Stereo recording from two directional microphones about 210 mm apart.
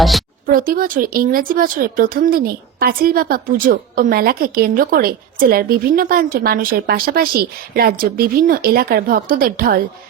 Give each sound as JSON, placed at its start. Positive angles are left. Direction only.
{"t": 0.4, "sound": "speech", "side_deg": -40}